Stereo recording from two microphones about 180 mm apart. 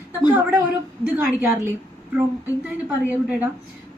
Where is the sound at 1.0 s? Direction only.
10° right (ahead or behind).